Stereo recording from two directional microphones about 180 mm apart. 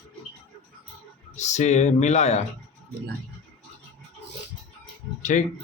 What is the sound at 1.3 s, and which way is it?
Speech, 40° left (ahead or behind).